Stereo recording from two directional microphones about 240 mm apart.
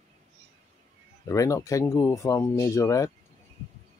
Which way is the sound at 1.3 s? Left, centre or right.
Centre.